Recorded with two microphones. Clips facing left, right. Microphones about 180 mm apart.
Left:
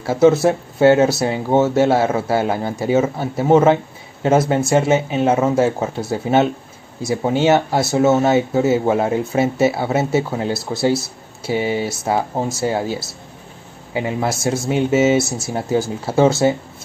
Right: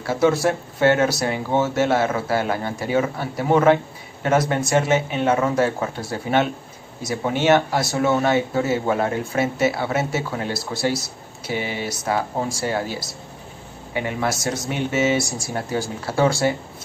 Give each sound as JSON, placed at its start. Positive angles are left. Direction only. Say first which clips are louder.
{"t": 0.0, "sound": "speech", "louder": "left 5 dB", "side_deg": 25}